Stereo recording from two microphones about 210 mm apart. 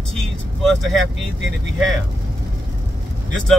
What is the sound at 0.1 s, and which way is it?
Speech, centre (ahead or behind).